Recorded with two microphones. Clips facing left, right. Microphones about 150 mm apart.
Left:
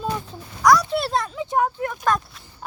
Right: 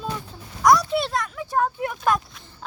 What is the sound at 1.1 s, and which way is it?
Speech, 30° left (ahead or behind).